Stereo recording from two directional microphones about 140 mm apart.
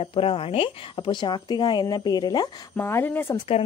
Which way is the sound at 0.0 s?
40° left (ahead or behind).